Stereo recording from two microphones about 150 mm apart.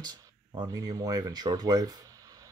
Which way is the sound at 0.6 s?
25° right (ahead or behind).